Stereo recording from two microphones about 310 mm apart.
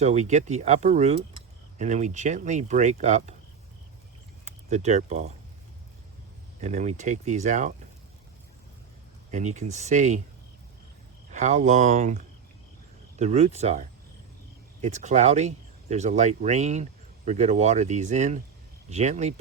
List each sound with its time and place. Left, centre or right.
0.0 s speech: right
4.7 s speech: right
6.6 s speech: right
9.3 s speech: right
11.3 s speech: right